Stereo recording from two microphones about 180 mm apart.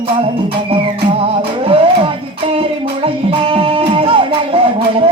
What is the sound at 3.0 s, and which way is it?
Music, 30° right (ahead or behind).